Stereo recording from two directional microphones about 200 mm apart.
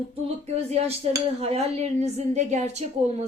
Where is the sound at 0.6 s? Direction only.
30° right (ahead or behind).